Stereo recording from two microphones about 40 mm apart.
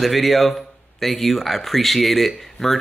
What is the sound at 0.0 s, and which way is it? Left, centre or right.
Speech, centre.